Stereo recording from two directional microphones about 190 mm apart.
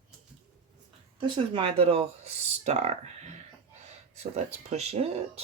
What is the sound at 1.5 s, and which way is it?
Speech, 25° right (ahead or behind).